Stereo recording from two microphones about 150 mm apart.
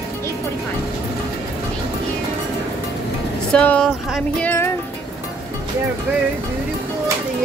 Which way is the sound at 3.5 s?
5° left (ahead or behind).